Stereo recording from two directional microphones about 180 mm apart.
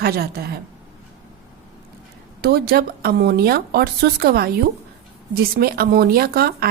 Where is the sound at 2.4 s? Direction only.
60° right (ahead or behind).